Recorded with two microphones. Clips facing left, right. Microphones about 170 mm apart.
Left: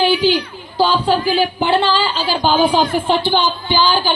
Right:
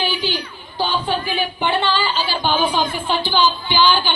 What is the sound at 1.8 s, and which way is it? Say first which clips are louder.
A woman's voice: left 3 dB; 40° left (ahead or behind).